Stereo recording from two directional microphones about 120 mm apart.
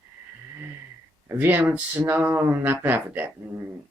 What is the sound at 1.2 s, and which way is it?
Speech, 15° right (ahead or behind).